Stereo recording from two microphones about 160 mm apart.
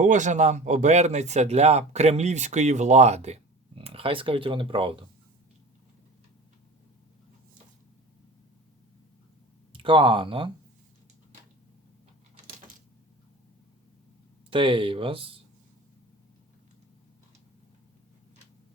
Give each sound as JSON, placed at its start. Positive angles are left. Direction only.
{"t": 0.0, "sound": "speech", "side_deg": -50}
{"t": 9.7, "sound": "speech", "side_deg": -30}
{"t": 14.5, "sound": "speech", "side_deg": -35}